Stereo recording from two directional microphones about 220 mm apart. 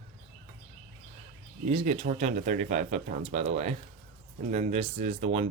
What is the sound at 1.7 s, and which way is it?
Speech, 30° right (ahead or behind).